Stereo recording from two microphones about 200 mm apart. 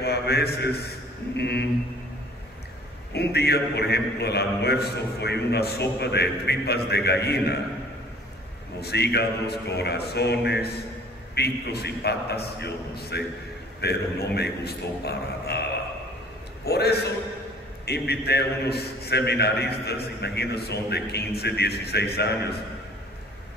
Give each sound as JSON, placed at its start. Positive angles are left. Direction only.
{"t": 0.0, "sound": "a man's voice", "side_deg": 55}
{"t": 3.1, "sound": "a man's voice", "side_deg": 55}
{"t": 8.8, "sound": "a man's voice", "side_deg": 55}
{"t": 16.6, "sound": "a man's voice", "side_deg": 55}